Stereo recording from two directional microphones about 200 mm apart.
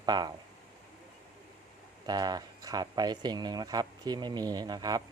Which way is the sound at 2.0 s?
20° right (ahead or behind).